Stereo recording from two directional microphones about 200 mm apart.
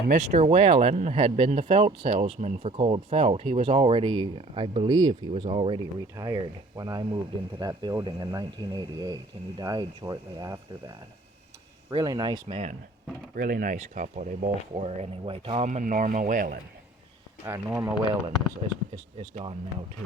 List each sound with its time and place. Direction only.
0.1 s speech: 35° right (ahead or behind)
13.3 s speech: 45° right (ahead or behind)
17.4 s speech: 15° right (ahead or behind)